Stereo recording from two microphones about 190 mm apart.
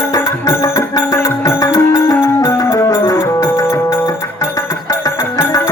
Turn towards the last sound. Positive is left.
turn(degrees=20)  # may be behind; listen again after turning